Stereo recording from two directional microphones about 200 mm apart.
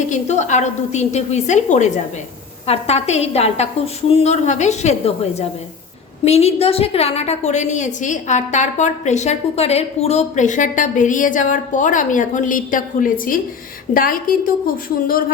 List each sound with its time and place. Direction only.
0.1 s a woman's voice: 35° left (ahead or behind)